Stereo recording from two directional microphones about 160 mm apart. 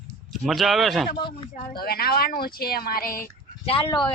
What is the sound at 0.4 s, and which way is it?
Speech, centre (ahead or behind).